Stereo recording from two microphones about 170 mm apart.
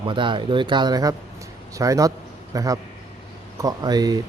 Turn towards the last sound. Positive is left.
turn(degrees=-25)  # may be behind; listen again after turning